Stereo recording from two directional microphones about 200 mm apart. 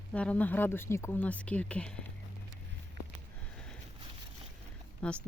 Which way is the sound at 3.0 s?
60° right (ahead or behind).